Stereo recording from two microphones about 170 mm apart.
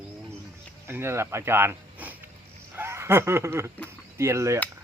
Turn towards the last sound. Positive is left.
turn(degrees=-15)  # may be behind; listen again after turning